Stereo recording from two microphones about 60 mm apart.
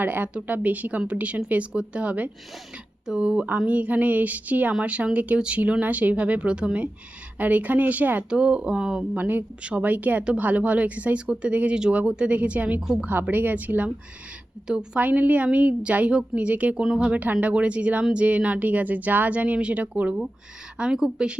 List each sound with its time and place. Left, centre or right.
0.0 s speech: right; by 3.4 s centre
3.7 s speech: right
7.3 s speech: right
8.3 s speech: centre
9.1 s speech: right
14.9 s speech: right
16.8 s speech: centre
17.1 s speech: right
20.7 s speech: centre